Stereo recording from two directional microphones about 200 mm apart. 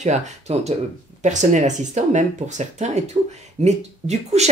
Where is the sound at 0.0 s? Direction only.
35° right (ahead or behind).